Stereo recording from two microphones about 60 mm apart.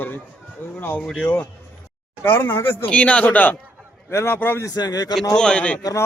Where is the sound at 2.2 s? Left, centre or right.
Left.